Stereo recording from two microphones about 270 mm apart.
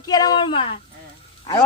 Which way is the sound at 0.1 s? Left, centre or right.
Centre.